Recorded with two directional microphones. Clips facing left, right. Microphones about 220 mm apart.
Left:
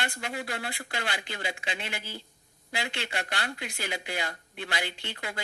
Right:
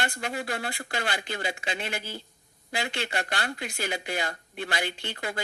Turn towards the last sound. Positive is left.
turn(degrees=-45)  # may be behind; listen again after turning